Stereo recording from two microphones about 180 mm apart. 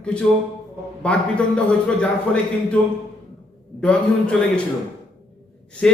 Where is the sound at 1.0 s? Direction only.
5° left (ahead or behind).